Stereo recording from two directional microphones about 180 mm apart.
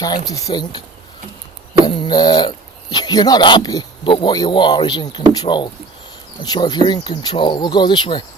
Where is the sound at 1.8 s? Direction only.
25° left (ahead or behind).